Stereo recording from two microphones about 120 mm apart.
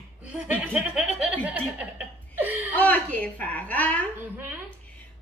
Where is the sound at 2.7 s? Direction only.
10° left (ahead or behind).